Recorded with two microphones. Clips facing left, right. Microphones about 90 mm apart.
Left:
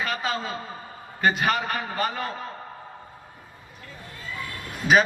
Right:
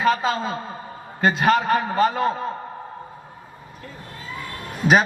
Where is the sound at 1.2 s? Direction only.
35° right (ahead or behind).